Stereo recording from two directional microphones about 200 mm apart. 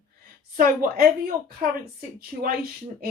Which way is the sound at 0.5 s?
45° right (ahead or behind).